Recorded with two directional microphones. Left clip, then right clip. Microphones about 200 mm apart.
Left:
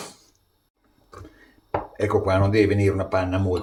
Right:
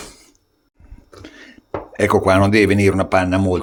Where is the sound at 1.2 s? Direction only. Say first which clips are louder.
Right 9 dB; 50° right (ahead or behind).